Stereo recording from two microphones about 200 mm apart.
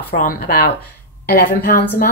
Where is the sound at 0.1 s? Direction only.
45° left (ahead or behind).